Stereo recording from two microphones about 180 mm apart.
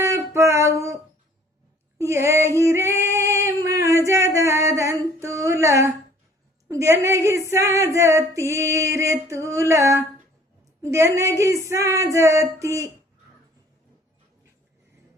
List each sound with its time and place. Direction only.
0.0 s music: 15° right (ahead or behind)
2.0 s female singing: 15° right (ahead or behind)
6.7 s a sound: 15° right (ahead or behind)
7.5 s female singing: 15° right (ahead or behind)
9.3 s a sound: 15° right (ahead or behind)
10.9 s speech: 15° right (ahead or behind)